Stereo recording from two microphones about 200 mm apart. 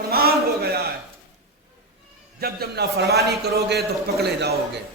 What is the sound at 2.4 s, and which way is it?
A man's voice, 50° right (ahead or behind).